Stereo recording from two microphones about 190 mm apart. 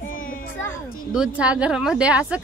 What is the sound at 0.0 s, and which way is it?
Children playing, 45° left (ahead or behind).